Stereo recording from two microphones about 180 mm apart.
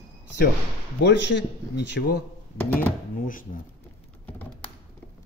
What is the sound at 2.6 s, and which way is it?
Speech, 10° left (ahead or behind).